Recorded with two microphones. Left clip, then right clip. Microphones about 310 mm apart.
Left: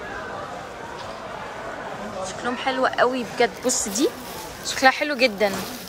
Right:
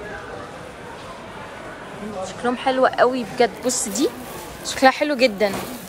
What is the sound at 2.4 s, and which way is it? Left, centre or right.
A woman's voice, centre.